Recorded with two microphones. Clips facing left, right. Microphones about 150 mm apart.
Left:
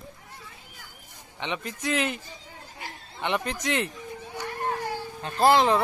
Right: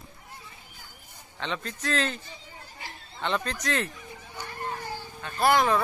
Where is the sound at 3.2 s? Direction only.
15° left (ahead or behind).